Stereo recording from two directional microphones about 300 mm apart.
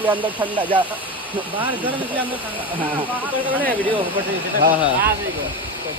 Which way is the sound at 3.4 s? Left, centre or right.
Centre.